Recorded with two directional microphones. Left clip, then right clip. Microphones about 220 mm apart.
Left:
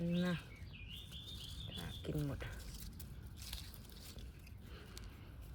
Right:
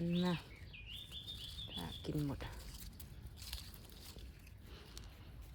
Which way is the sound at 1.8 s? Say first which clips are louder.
Right 1 dB; 25° right (ahead or behind).